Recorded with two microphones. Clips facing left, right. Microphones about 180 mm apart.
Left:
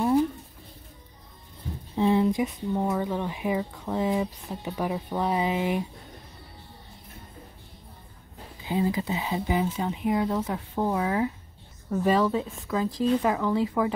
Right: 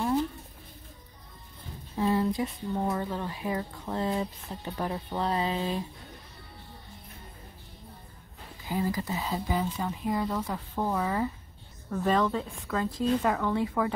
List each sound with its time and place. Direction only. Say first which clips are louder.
2.0 s speech: left 4 dB; 20° left (ahead or behind)
8.6 s speech: left 4 dB; 20° left (ahead or behind); by 13.9 s 5° left (ahead or behind)